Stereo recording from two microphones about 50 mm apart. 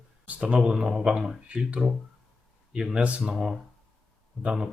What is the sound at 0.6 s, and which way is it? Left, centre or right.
Speech, centre.